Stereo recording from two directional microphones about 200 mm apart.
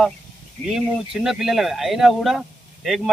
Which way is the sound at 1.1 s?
Centre (ahead or behind).